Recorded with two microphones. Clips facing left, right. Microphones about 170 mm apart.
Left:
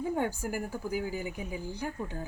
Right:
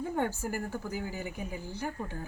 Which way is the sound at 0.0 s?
10° left (ahead or behind).